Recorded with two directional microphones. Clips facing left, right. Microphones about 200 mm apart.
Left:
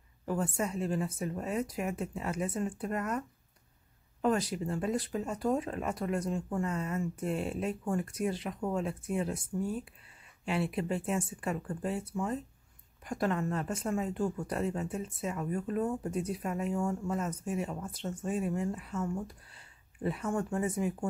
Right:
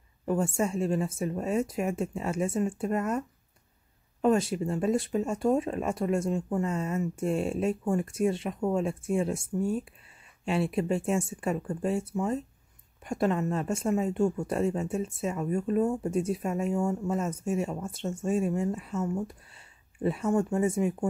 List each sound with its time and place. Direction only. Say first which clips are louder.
0.2 s speech: right 5 dB; 25° right (ahead or behind)